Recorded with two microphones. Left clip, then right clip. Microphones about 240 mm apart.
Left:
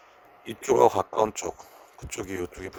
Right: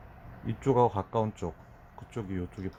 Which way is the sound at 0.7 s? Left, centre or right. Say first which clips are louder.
Left 5 dB; left.